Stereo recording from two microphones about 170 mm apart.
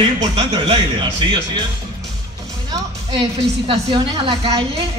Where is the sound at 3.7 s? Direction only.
35° right (ahead or behind).